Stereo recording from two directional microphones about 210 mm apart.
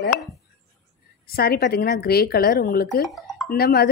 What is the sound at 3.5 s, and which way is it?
Speech, 50° left (ahead or behind).